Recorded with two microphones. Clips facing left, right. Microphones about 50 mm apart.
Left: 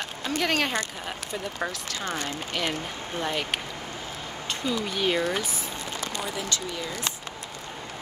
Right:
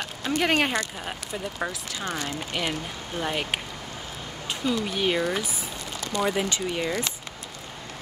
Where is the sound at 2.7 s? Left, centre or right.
Centre.